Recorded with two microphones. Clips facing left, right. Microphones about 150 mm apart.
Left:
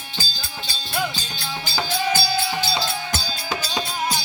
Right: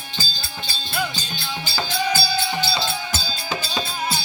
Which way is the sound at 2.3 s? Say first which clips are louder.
Even; centre (ahead or behind).